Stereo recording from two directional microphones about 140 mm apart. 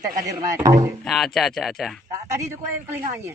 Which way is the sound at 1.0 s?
Centre (ahead or behind).